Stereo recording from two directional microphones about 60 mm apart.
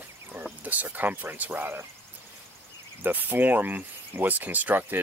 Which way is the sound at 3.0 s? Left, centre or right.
Right.